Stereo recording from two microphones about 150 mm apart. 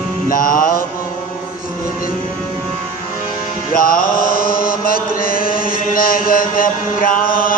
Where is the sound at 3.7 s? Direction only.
70° left (ahead or behind).